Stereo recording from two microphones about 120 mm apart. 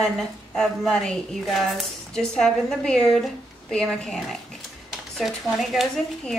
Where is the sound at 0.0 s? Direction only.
5° left (ahead or behind).